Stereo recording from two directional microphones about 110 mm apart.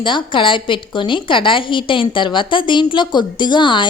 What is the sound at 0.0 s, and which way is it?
A woman's voice, 50° left (ahead or behind).